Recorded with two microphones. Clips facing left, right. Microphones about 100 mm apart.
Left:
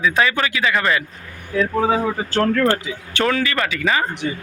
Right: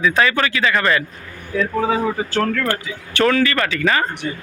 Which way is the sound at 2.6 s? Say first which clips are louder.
Left 4 dB; 20° left (ahead or behind).